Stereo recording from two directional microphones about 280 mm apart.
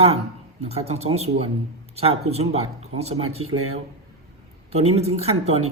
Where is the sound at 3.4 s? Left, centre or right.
Right.